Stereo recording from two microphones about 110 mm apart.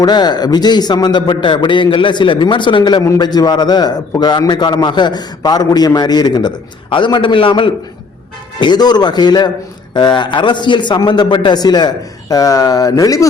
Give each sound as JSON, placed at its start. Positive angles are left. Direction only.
{"t": 0.0, "sound": "a man's voice", "side_deg": 40}